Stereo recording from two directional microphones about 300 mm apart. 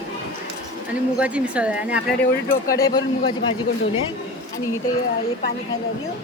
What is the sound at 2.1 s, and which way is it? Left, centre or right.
Speech, left.